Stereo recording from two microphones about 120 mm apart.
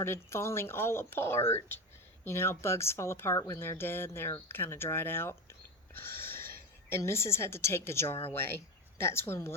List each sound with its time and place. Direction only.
0.0 s speech: 20° left (ahead or behind)